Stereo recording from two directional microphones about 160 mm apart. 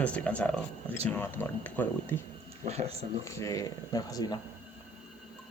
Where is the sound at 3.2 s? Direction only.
20° left (ahead or behind).